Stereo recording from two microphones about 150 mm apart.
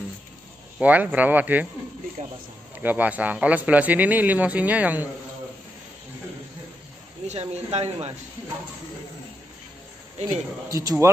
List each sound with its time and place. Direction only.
0.7 s a man's voice: 10° right (ahead or behind)
2.7 s a man's voice: 10° right (ahead or behind)
7.2 s speech: 45° right (ahead or behind)
10.7 s speech: 20° right (ahead or behind)